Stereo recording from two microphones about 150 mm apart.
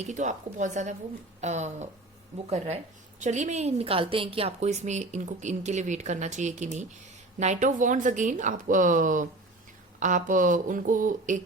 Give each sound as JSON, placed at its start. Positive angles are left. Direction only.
{"t": 0.0, "sound": "a woman's voice", "side_deg": -55}
{"t": 3.2, "sound": "a woman's voice", "side_deg": -55}